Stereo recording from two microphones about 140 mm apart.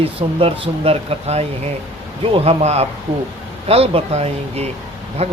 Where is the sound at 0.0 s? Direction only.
40° right (ahead or behind).